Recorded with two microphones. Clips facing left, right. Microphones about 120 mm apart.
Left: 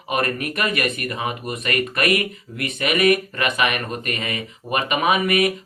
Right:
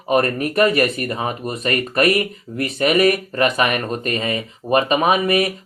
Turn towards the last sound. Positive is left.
turn(degrees=-30)  # may be behind; listen again after turning